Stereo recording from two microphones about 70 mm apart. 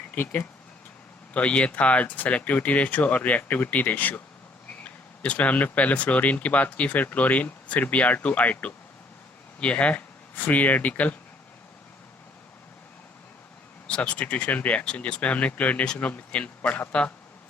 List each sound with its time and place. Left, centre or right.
1.3 s speech: centre
13.8 s speech: centre